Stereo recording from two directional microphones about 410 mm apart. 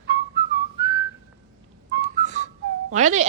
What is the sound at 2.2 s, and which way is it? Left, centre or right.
Whistling, centre.